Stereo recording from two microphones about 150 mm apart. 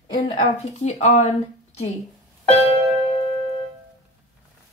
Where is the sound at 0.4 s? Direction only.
45° left (ahead or behind).